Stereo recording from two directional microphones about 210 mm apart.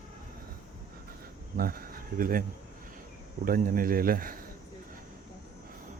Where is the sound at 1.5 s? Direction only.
45° right (ahead or behind).